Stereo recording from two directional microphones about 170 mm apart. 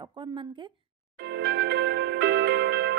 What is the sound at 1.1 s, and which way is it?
Music, 75° right (ahead or behind).